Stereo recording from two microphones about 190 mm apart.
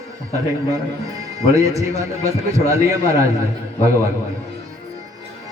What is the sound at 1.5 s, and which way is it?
A man's voice, 15° right (ahead or behind).